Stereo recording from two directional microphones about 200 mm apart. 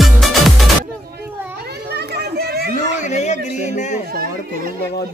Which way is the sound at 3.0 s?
35° left (ahead or behind).